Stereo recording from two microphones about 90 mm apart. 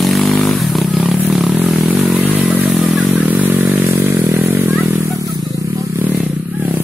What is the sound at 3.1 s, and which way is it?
Vehicle, 20° right (ahead or behind).